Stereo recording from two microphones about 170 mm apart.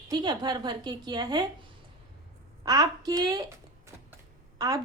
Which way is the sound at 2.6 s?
20° right (ahead or behind).